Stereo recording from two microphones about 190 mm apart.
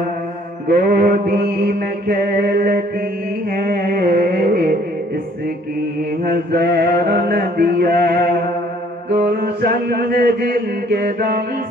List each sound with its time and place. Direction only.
0.7 s mantra: 50° right (ahead or behind)
6.3 s mantra: 55° right (ahead or behind)